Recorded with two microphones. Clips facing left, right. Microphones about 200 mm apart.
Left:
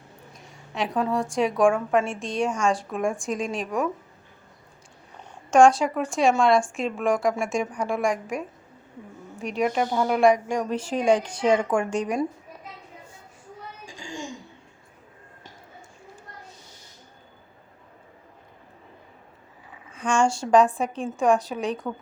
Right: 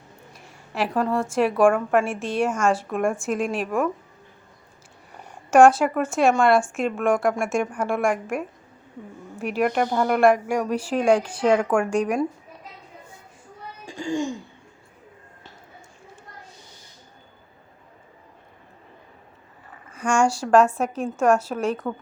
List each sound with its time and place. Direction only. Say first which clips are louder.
0.3 s a woman's voice: right 3 dB; 5° right (ahead or behind)
5.1 s a woman's voice: right 2 dB; 10° right (ahead or behind)
13.8 s speech: right 12 dB; 60° right (ahead or behind)
19.7 s a sound: right 2 dB; 10° right (ahead or behind)
21.2 s a woman's voice: right 2 dB; centre (ahead or behind)